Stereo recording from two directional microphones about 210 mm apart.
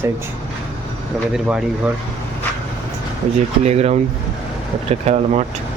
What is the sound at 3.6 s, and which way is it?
Speech, 30° right (ahead or behind).